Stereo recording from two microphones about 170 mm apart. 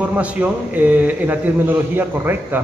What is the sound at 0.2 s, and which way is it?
A man's voice, 10° right (ahead or behind).